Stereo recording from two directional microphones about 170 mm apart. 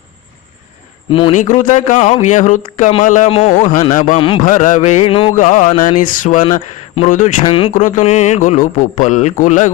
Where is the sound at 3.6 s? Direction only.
50° left (ahead or behind).